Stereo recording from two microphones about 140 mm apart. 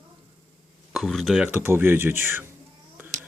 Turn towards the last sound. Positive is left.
turn(degrees=-15)  # may be behind; listen again after turning